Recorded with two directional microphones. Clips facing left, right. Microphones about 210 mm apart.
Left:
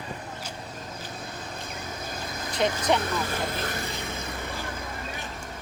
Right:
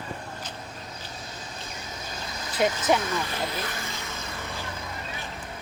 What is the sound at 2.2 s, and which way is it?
Vehicle, 55° left (ahead or behind).